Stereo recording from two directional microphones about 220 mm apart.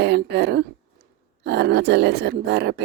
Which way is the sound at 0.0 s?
50° right (ahead or behind).